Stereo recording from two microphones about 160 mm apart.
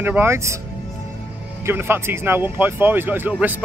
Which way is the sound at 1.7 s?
15° right (ahead or behind).